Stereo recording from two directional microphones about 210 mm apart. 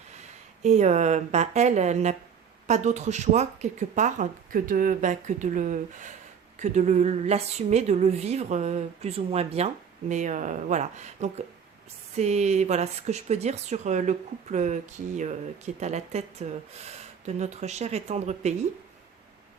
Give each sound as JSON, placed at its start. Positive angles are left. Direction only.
{"t": 0.2, "sound": "speech", "side_deg": -30}